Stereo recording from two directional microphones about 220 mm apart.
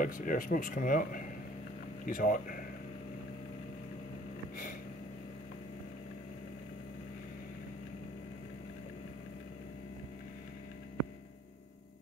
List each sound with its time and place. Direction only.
0.0 s speech: 40° left (ahead or behind)